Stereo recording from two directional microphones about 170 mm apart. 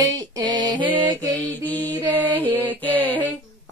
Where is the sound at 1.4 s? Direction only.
10° left (ahead or behind).